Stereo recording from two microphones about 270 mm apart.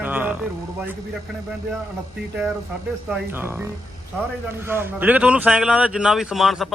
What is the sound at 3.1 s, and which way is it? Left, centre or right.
A man's voice, centre.